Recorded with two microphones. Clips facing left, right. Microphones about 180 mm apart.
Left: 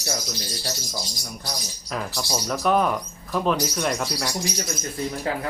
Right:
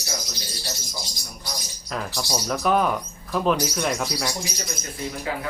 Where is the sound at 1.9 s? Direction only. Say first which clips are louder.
Even; 5° left (ahead or behind).